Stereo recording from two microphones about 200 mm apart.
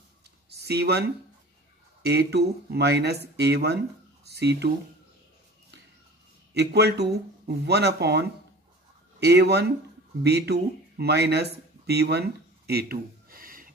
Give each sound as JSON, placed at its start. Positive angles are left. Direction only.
{"t": 0.6, "sound": "speech", "side_deg": -55}
{"t": 2.0, "sound": "speech", "side_deg": -55}
{"t": 6.5, "sound": "speech", "side_deg": -55}